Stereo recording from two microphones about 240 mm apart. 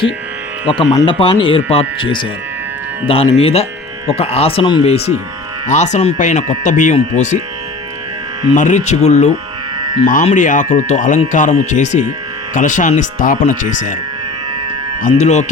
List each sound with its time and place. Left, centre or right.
0.7 s speech: left
3.1 s speech: left
8.5 s speech: left
9.8 s music: centre
10.1 s speech: left
15.0 s speech: left